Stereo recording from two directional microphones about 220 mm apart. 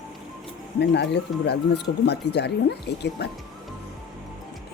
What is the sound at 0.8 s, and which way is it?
Speech, 50° left (ahead or behind).